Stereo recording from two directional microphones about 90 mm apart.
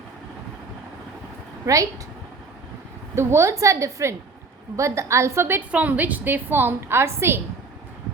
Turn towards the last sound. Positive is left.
turn(degrees=-25)  # may be behind; listen again after turning